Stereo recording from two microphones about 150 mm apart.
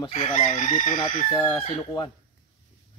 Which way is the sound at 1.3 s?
35° left (ahead or behind).